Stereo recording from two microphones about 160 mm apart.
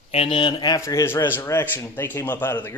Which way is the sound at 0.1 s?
35° left (ahead or behind).